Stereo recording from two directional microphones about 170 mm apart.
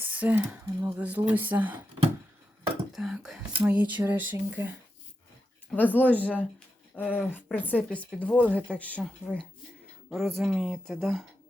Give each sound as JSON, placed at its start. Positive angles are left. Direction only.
{"t": 0.0, "sound": "speech", "side_deg": -10}
{"t": 2.9, "sound": "speech", "side_deg": 0}
{"t": 5.7, "sound": "speech", "side_deg": 10}
{"t": 6.1, "sound": "speech", "side_deg": -10}
{"t": 6.9, "sound": "speech", "side_deg": 10}
{"t": 10.3, "sound": "speech", "side_deg": -5}